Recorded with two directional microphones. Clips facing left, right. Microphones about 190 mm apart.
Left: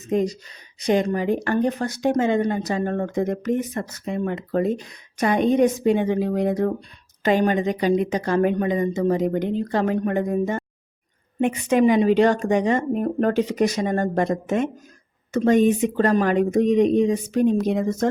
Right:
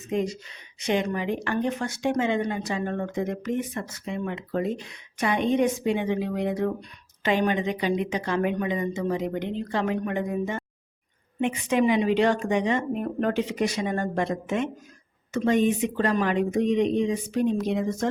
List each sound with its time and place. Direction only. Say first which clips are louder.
0.1 s speech: left 5 dB; 40° left (ahead or behind)